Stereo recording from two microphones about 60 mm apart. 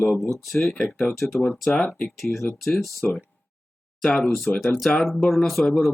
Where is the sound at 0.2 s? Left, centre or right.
Centre.